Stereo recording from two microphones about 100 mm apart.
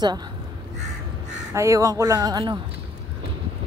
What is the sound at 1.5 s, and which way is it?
Speech, 30° right (ahead or behind).